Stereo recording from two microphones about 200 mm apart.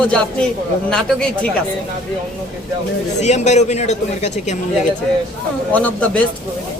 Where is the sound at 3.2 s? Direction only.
35° left (ahead or behind).